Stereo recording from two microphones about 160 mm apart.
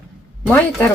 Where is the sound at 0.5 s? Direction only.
10° left (ahead or behind).